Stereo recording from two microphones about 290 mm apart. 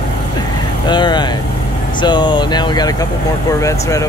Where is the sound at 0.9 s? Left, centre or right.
Centre.